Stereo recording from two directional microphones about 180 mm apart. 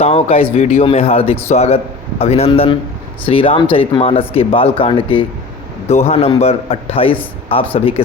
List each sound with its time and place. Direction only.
0.0 s a man's voice: 35° left (ahead or behind)